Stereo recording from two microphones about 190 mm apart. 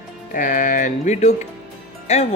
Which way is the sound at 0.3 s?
45° left (ahead or behind).